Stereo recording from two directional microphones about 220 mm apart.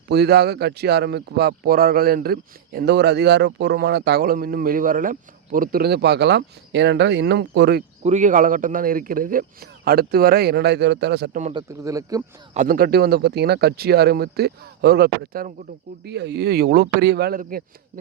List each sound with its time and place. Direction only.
0.1 s speech: 45° right (ahead or behind)
8.0 s speech: 35° right (ahead or behind); by 11.3 s 50° right (ahead or behind)
11.5 s speech: 15° right (ahead or behind)
12.5 s speech: 40° right (ahead or behind)